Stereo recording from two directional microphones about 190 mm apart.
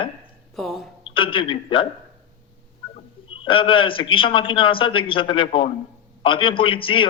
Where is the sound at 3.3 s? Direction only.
25° left (ahead or behind).